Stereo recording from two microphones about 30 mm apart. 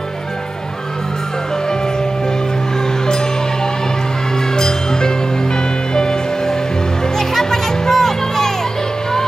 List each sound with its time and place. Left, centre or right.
4.6 s music: centre